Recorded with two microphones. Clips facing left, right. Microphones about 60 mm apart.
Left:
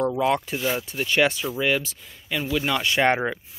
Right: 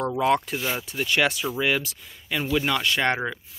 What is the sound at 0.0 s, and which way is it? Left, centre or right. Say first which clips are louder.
Speech: even; centre.